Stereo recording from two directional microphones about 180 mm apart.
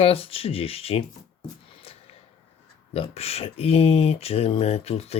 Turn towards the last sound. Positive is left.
turn(degrees=35)  # may be behind; listen again after turning